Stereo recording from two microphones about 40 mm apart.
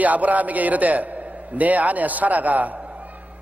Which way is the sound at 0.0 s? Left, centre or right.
Right.